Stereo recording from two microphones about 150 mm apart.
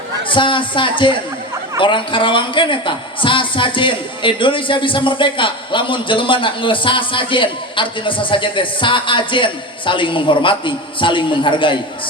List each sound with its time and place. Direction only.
0.3 s a woman's voice: 35° left (ahead or behind)